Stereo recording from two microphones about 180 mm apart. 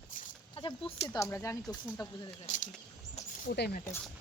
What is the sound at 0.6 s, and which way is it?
Speech, 30° left (ahead or behind).